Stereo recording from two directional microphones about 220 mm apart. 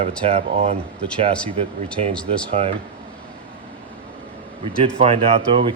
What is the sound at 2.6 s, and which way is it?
Speech, 30° right (ahead or behind).